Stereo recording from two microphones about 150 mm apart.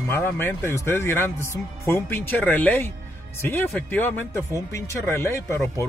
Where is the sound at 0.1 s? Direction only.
15° left (ahead or behind).